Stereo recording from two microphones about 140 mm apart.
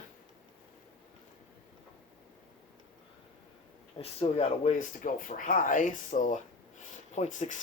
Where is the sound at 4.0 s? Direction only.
45° left (ahead or behind).